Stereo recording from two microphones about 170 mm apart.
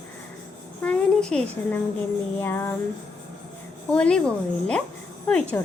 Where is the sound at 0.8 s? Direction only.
5° left (ahead or behind).